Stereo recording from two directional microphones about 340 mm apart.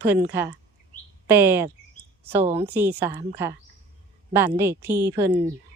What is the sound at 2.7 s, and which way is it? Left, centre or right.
Speech, centre.